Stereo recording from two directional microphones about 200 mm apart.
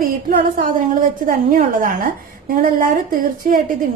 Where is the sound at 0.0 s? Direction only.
45° right (ahead or behind).